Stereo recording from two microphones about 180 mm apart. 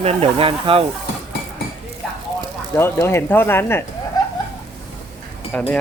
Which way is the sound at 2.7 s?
15° left (ahead or behind).